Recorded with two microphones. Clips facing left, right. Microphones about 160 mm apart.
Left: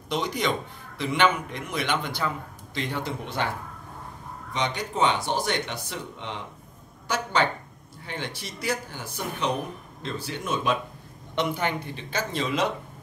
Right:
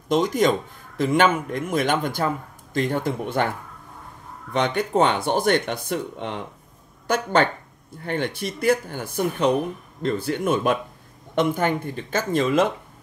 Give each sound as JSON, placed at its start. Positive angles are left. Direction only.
{"t": 0.1, "sound": "a man's voice", "side_deg": -45}